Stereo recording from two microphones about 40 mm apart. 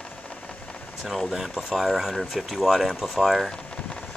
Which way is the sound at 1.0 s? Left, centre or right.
Centre.